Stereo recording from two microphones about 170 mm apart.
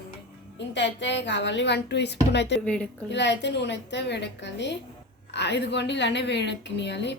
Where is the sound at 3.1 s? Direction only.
90° left.